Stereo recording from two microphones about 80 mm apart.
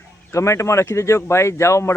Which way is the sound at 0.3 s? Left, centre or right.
Left.